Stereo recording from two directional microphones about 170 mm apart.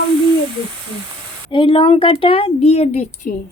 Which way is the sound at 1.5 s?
30° left (ahead or behind).